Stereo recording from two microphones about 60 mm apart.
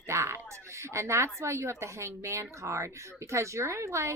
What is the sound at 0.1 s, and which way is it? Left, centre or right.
Speech, right.